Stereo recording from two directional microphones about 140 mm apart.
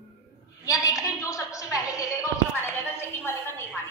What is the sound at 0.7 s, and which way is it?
A woman's voice, 25° left (ahead or behind).